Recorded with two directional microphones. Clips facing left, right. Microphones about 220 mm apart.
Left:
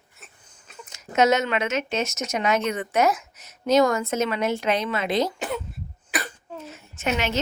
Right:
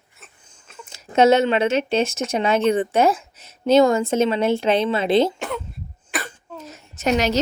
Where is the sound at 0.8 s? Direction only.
30° right (ahead or behind).